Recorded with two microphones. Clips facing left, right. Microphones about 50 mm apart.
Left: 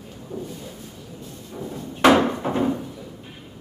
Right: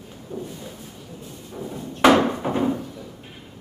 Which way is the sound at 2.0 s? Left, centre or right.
Centre.